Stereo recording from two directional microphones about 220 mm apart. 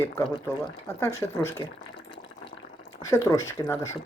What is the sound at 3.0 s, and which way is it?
Speech, 15° left (ahead or behind).